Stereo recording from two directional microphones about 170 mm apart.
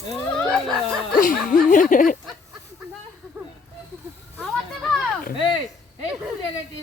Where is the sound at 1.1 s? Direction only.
55° left (ahead or behind).